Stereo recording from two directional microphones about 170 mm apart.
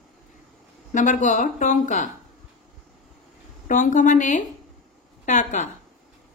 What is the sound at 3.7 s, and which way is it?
Speech, 50° left (ahead or behind).